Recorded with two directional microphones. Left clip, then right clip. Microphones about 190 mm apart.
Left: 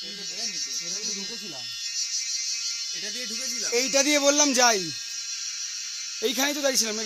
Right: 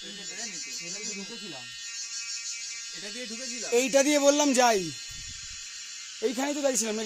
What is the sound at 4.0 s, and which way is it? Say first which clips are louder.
Speech: left 4 dB; 15° right (ahead or behind).